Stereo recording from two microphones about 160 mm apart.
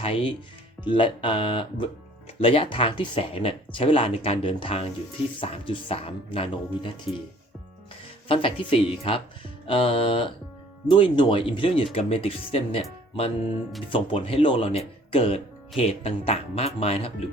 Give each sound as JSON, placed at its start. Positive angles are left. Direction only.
{"t": 0.0, "sound": "speech", "side_deg": 35}
{"t": 8.3, "sound": "speech", "side_deg": 35}